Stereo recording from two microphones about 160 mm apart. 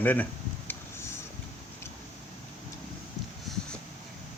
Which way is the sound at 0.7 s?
15° left (ahead or behind).